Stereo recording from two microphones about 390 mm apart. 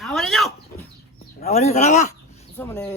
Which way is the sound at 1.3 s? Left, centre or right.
Centre.